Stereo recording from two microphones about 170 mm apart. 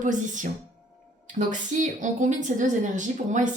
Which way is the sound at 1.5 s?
50° right (ahead or behind).